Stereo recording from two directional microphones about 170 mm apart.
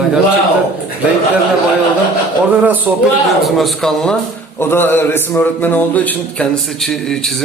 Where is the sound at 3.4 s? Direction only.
Centre (ahead or behind).